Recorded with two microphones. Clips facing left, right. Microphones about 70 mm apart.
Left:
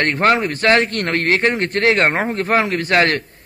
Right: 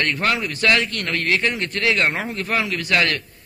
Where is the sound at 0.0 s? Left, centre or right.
Left.